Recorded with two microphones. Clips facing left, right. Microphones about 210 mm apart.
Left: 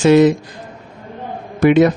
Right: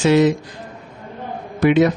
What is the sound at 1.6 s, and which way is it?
Speech, 50° left (ahead or behind).